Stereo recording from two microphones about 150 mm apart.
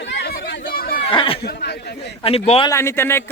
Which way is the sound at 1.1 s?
35° left (ahead or behind).